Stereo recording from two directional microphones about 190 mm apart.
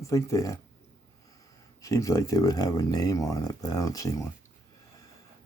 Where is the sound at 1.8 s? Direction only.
15° left (ahead or behind).